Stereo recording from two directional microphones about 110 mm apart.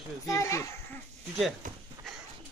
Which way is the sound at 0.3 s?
30° left (ahead or behind).